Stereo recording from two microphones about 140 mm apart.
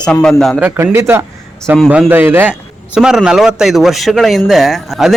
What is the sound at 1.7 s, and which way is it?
A man's voice, 5° right (ahead or behind).